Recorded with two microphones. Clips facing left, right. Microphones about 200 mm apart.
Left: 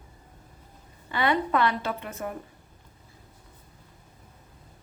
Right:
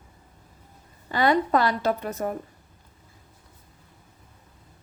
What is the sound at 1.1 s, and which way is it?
A woman's voice, 40° right (ahead or behind).